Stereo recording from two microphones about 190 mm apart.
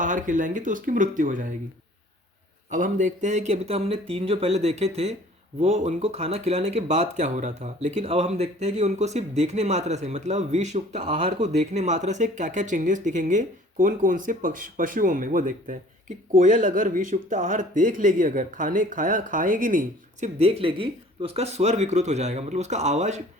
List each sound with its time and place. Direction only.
0.0 s speech: 45° right (ahead or behind)
2.6 s speech: 40° right (ahead or behind)